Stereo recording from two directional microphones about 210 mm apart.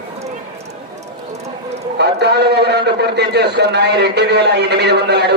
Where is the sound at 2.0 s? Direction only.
50° right (ahead or behind).